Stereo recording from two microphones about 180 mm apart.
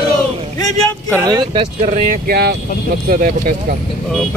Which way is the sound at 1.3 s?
25° right (ahead or behind).